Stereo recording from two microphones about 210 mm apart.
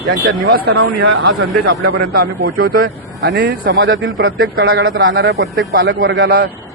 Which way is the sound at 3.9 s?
70° right (ahead or behind).